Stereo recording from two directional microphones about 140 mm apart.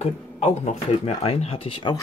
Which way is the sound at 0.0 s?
50° left (ahead or behind).